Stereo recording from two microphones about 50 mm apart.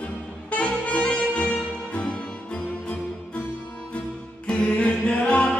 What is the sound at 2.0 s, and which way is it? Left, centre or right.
Music, left.